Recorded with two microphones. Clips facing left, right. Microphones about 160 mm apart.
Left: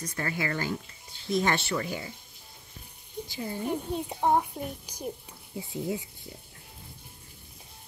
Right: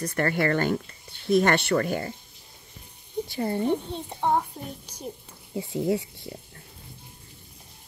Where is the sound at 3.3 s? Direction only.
60° right (ahead or behind).